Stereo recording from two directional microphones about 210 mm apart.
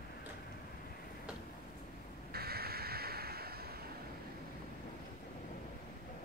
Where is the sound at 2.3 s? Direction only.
50° right (ahead or behind).